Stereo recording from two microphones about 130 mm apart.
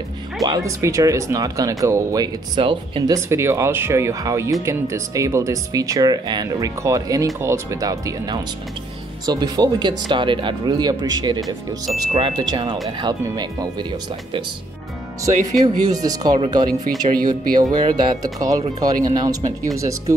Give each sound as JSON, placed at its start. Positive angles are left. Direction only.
{"t": 0.4, "sound": "speech", "side_deg": -25}
{"t": 2.5, "sound": "speech", "side_deg": -40}
{"t": 3.1, "sound": "speech", "side_deg": -20}
{"t": 15.6, "sound": "speech", "side_deg": -30}